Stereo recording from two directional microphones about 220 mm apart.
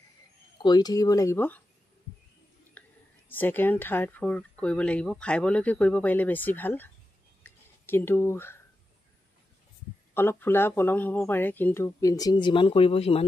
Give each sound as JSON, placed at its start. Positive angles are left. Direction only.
{"t": 0.6, "sound": "speech", "side_deg": 20}
{"t": 2.8, "sound": "whispering", "side_deg": 5}
{"t": 3.3, "sound": "speech", "side_deg": 10}
{"t": 7.4, "sound": "a sound", "side_deg": 10}
{"t": 10.1, "sound": "speech", "side_deg": 10}